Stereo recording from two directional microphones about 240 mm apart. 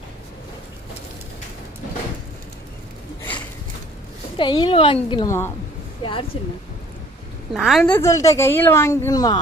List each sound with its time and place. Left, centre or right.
4.4 s a woman's voice: centre
7.5 s speech: centre